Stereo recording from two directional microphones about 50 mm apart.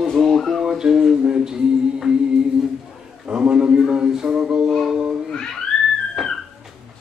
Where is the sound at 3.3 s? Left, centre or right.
Centre.